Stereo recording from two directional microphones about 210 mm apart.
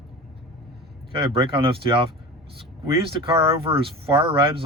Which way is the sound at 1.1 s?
25° right (ahead or behind).